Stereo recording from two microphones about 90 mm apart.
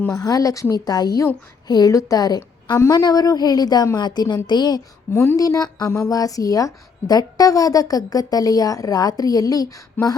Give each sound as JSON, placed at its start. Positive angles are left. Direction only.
{"t": 0.1, "sound": "a woman's voice", "side_deg": 40}
{"t": 5.1, "sound": "a woman's voice", "side_deg": 25}
{"t": 5.4, "sound": "a woman's voice", "side_deg": 45}